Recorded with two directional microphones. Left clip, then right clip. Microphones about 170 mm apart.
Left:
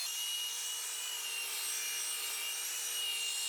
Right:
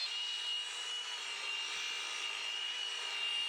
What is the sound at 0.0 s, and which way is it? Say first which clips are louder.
Wood: even; 10° left (ahead or behind).